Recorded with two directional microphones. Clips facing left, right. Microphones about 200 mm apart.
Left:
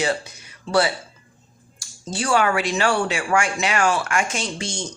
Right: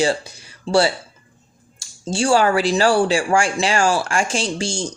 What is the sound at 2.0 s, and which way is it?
Speech, 30° right (ahead or behind).